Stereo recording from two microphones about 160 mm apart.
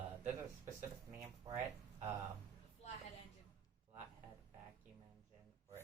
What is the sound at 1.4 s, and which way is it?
Speech, 20° right (ahead or behind).